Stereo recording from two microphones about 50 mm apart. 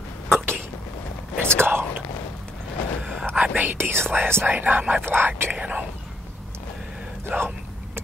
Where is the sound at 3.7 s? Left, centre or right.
Right.